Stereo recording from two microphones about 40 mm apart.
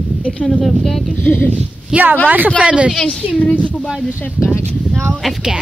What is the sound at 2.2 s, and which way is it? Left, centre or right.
Speech, right.